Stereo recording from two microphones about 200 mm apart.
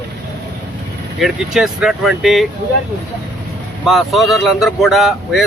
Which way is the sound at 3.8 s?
Centre (ahead or behind).